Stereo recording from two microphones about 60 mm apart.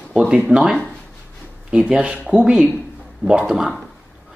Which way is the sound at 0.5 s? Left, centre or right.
Right.